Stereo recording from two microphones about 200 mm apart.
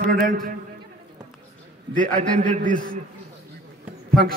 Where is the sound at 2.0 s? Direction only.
40° right (ahead or behind).